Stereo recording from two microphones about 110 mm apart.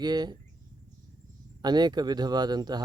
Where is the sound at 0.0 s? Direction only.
40° right (ahead or behind).